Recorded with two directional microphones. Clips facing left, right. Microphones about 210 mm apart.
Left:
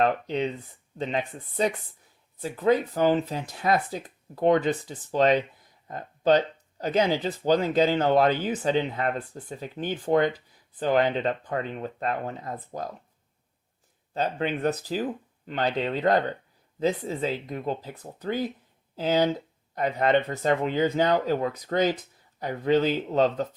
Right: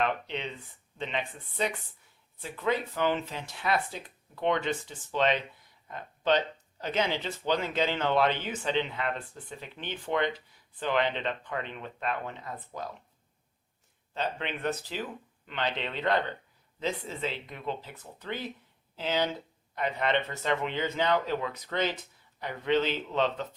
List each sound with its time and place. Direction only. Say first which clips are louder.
0.0 s speech: left 7 dB; 40° left (ahead or behind)
14.1 s speech: left 6 dB; 40° left (ahead or behind)